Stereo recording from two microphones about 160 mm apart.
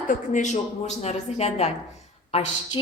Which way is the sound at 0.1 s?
50° left (ahead or behind).